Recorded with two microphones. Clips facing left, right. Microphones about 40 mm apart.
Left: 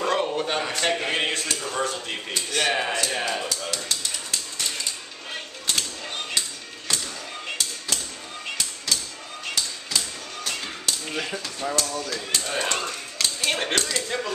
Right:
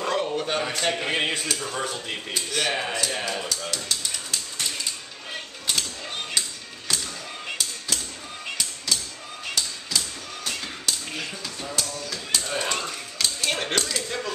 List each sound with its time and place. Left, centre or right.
0.0 s speech: centre
5.3 s music: centre
7.4 s tap: centre
8.5 s a sound: centre
14.0 s speech: centre